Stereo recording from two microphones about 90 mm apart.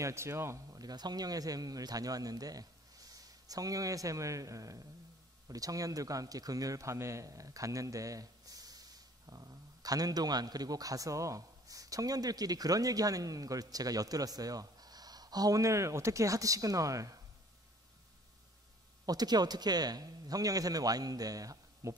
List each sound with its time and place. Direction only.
0.0 s speech: 30° right (ahead or behind)
0.8 s speech: 50° right (ahead or behind)
19.0 s speech: 50° right (ahead or behind)